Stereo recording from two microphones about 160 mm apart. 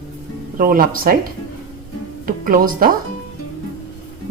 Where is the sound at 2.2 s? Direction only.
60° right (ahead or behind).